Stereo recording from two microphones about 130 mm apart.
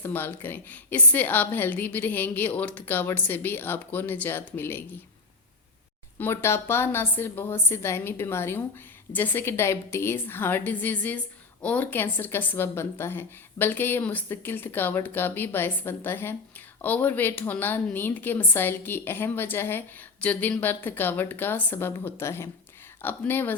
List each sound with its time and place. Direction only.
0.0 s a woman's voice: 15° left (ahead or behind)
6.1 s a woman's voice: 15° left (ahead or behind)